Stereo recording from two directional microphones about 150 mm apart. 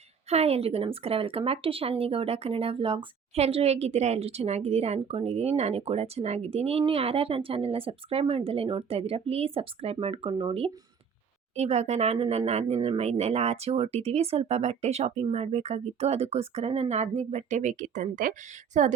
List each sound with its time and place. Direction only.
0.3 s speech: 45° right (ahead or behind)